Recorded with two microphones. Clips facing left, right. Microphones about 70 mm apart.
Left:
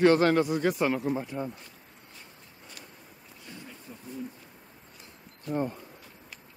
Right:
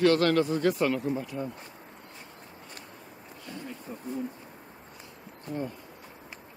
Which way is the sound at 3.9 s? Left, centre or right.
Right.